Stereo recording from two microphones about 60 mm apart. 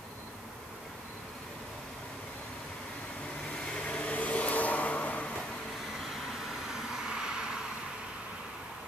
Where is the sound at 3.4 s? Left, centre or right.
Centre.